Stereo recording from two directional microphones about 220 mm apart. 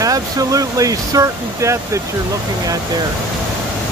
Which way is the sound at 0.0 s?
15° right (ahead or behind).